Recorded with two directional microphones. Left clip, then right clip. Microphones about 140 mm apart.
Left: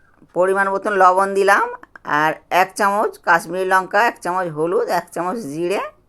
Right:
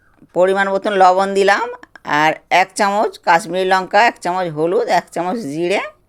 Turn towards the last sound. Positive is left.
turn(degrees=-20)  # may be behind; listen again after turning